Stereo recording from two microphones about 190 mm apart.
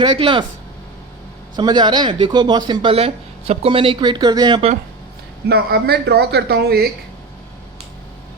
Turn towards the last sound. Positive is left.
turn(degrees=-55)  # may be behind; listen again after turning